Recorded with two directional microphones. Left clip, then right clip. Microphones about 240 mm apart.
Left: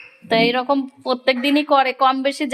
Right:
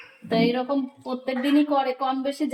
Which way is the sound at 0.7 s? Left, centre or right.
Left.